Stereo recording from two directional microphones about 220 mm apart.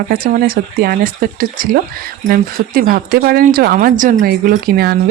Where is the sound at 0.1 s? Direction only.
40° right (ahead or behind).